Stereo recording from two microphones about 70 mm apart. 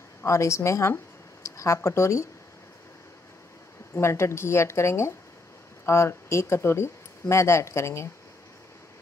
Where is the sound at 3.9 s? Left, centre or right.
Left.